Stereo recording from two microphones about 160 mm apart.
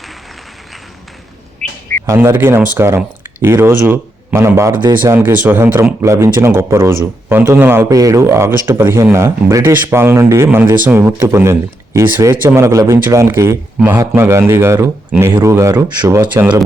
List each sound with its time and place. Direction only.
2.0 s speech: 15° right (ahead or behind)
5.1 s speech: 10° right (ahead or behind)